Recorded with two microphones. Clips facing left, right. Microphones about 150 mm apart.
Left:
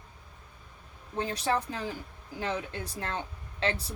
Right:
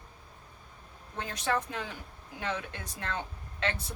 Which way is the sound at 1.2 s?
30° left (ahead or behind).